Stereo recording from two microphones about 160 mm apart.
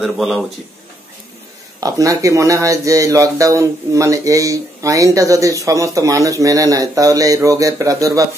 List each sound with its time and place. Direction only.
0.0 s a man's voice: centre (ahead or behind)
1.8 s speech: 20° right (ahead or behind)